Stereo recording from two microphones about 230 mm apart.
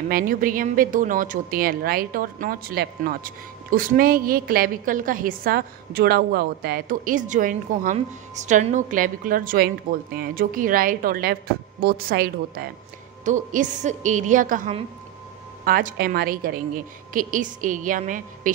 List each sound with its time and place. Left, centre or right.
0.1 s a woman's voice: right